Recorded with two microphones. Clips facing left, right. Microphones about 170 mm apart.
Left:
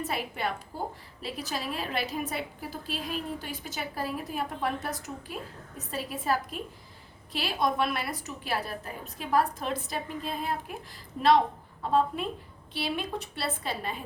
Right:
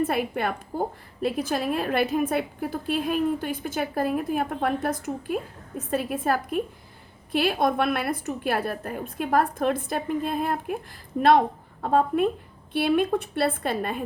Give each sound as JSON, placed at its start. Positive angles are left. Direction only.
{"t": 0.0, "sound": "a woman's voice", "side_deg": -55}